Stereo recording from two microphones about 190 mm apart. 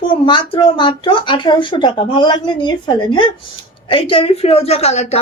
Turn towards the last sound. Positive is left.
turn(degrees=35)  # may be behind; listen again after turning